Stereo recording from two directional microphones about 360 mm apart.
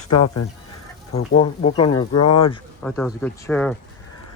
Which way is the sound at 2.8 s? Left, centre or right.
Centre.